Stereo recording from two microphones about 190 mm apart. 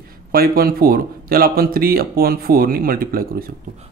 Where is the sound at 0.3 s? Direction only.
50° right (ahead or behind).